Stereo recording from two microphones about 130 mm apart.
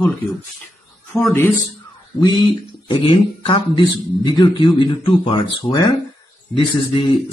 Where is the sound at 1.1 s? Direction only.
5° right (ahead or behind).